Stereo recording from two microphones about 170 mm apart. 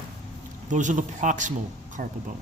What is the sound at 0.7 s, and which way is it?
Speech, 45° right (ahead or behind).